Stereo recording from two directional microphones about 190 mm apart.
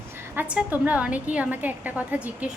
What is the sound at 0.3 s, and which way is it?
A woman's voice, 5° right (ahead or behind).